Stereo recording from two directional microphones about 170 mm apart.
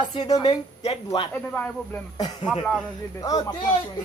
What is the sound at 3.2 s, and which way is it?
Speech, 25° left (ahead or behind).